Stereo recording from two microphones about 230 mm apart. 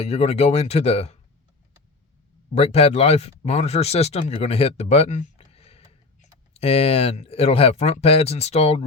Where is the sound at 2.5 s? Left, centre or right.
Left.